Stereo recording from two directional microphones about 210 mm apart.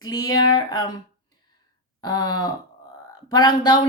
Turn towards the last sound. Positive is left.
turn(degrees=20)  # may be behind; listen again after turning